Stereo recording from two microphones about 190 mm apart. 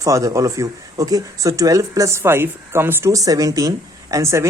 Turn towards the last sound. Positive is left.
turn(degrees=-15)  # may be behind; listen again after turning